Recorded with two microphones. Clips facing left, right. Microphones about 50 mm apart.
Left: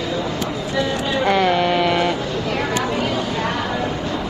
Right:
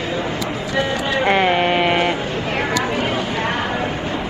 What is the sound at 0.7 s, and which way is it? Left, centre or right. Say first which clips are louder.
Speech: right 1 dB; right.